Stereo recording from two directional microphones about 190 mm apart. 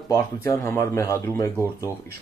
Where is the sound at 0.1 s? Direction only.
15° left (ahead or behind).